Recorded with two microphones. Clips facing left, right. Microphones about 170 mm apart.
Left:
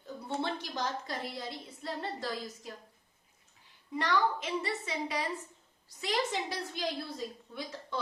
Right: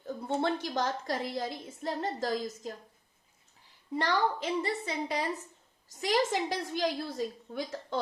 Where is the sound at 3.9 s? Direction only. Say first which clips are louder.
Right 1 dB; 35° right (ahead or behind).